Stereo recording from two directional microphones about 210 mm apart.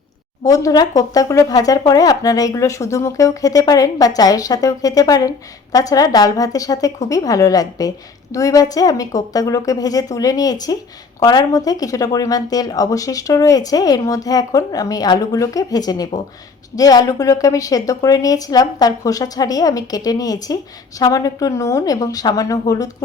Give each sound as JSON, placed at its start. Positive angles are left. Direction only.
{"t": 0.4, "sound": "speech", "side_deg": 15}